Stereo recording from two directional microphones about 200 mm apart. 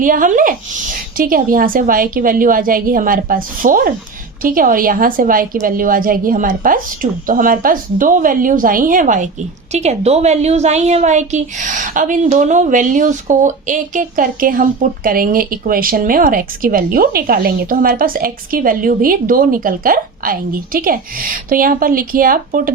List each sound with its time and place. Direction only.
0.0 s a woman's voice: 40° right (ahead or behind)